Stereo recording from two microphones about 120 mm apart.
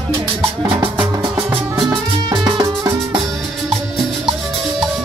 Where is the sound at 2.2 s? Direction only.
40° right (ahead or behind).